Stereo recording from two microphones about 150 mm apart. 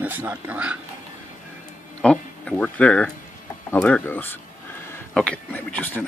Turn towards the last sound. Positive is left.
turn(degrees=10)  # may be behind; listen again after turning